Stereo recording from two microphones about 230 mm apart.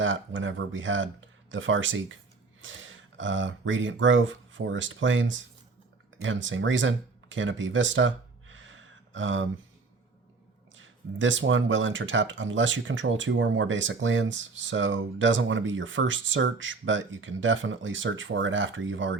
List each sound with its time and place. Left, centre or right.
0.0 s speech: right
10.8 s speech: right